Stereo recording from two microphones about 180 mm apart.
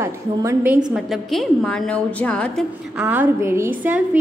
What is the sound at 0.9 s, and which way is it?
A woman's voice, centre (ahead or behind).